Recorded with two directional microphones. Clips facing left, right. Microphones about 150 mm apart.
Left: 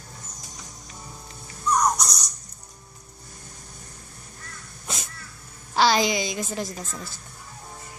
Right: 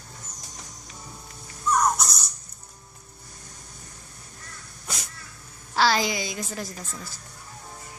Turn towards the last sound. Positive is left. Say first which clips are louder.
# left 4 dB
turn(degrees=20)  # may be behind; listen again after turning